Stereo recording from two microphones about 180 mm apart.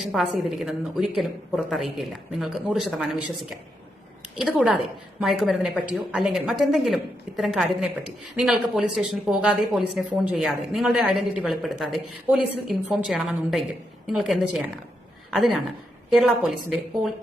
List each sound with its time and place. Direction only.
0.0 s a woman's voice: centre (ahead or behind)
4.4 s a woman's voice: centre (ahead or behind)